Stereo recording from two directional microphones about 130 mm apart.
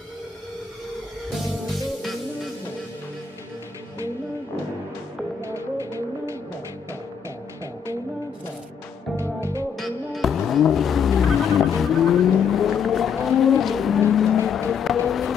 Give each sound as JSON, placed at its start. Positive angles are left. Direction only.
{"t": 1.3, "sound": "music", "side_deg": 0}
{"t": 5.4, "sound": "music", "side_deg": -20}
{"t": 9.1, "sound": "music", "side_deg": -20}
{"t": 9.8, "sound": "vehicle", "side_deg": 0}